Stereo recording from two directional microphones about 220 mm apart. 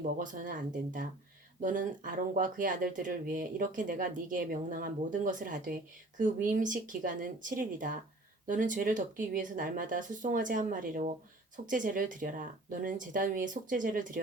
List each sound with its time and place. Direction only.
0.2 s speech: 35° right (ahead or behind)